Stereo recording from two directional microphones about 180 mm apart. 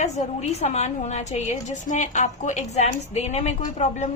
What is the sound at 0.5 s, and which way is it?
A woman's voice, 40° left (ahead or behind).